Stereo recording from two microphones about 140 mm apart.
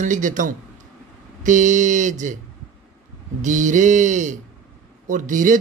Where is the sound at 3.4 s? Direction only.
65° right (ahead or behind).